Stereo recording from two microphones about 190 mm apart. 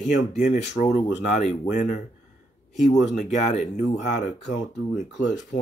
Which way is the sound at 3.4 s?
35° left (ahead or behind).